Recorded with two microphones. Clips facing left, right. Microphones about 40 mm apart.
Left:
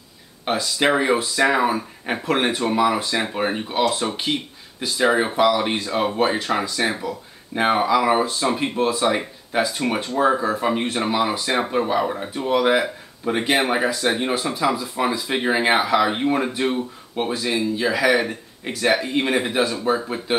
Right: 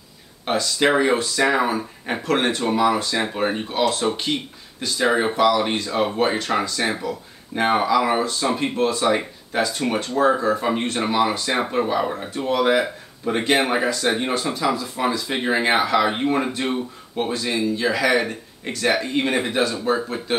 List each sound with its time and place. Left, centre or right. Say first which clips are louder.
0.5 s speech: right 1 dB; centre